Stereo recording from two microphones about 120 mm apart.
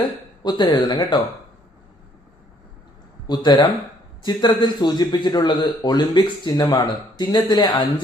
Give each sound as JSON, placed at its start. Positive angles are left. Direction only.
{"t": 0.4, "sound": "a man's voice", "side_deg": 35}
{"t": 3.2, "sound": "a man's voice", "side_deg": 35}